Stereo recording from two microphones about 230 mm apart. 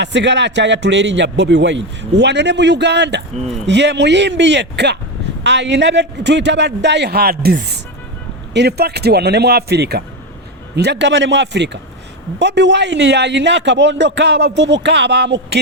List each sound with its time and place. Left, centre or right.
0.0 s a man's voice: right